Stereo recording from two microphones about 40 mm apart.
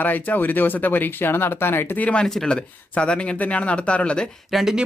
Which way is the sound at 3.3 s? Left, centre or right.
Left.